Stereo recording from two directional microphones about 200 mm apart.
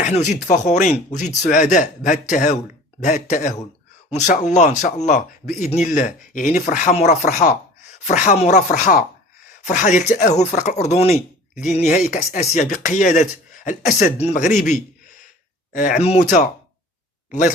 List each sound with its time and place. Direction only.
0.0 s speech: 35° left (ahead or behind)